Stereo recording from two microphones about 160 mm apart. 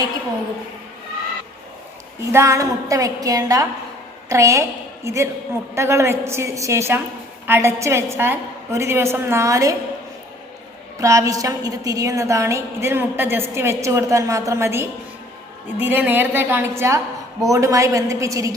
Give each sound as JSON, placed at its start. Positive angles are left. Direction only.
{"t": 2.2, "sound": "a woman's voice", "side_deg": -20}
{"t": 11.0, "sound": "a woman's voice", "side_deg": -20}